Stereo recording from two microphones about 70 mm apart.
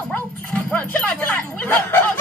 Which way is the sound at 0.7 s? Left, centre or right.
Left.